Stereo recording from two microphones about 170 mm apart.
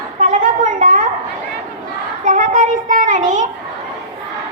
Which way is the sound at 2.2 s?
50° right (ahead or behind).